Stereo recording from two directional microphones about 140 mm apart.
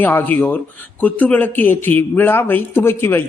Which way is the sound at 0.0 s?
15° left (ahead or behind).